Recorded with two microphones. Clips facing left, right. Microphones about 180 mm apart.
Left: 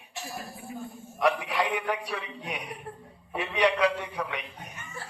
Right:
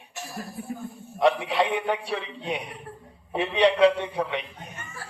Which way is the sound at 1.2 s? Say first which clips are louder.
Right 4 dB; 25° right (ahead or behind).